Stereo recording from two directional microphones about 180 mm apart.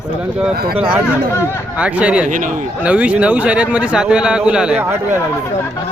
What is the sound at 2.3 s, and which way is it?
Speech, 45° right (ahead or behind).